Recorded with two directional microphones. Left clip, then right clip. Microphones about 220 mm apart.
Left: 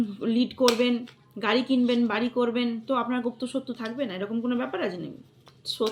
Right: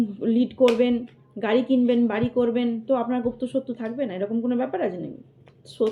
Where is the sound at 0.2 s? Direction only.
15° left (ahead or behind).